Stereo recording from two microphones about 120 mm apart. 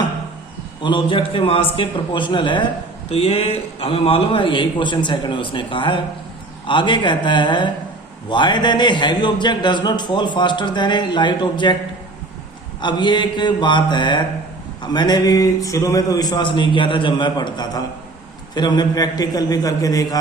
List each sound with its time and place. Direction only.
0.8 s a man's voice: 40° left (ahead or behind)
3.1 s a man's voice: 50° left (ahead or behind)
12.8 s speech: 40° left (ahead or behind)